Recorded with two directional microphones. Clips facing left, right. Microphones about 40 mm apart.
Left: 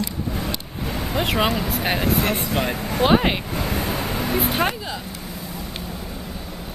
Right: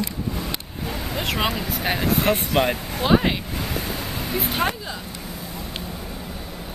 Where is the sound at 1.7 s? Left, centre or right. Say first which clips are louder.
Left 1 dB; centre.